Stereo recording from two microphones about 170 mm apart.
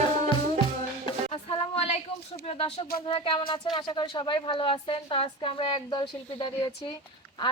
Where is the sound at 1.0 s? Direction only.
30° left (ahead or behind).